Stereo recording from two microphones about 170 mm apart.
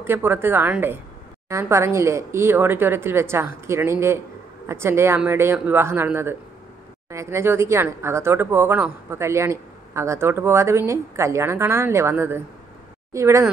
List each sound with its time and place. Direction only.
0.0 s speech: 10° right (ahead or behind)